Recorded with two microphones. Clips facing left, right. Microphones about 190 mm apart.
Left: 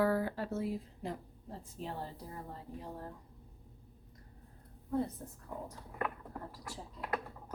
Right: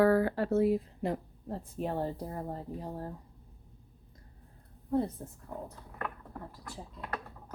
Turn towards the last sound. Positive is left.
turn(degrees=10)  # may be behind; listen again after turning